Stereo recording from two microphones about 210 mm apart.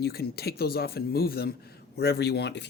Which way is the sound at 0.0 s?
50° left (ahead or behind).